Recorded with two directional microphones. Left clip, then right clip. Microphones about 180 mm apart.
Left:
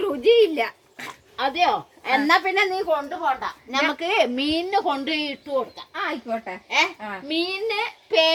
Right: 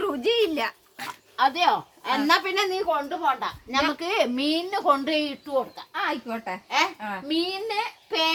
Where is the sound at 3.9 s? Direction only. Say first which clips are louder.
Left 3 dB; 25° right (ahead or behind).